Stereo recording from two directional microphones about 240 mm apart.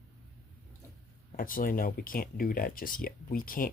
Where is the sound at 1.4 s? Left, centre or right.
Left.